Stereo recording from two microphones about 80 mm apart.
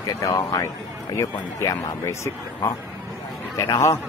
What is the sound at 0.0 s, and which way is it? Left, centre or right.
Speech, left.